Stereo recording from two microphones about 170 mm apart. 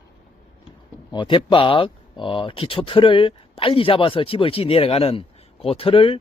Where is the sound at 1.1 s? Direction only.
30° left (ahead or behind).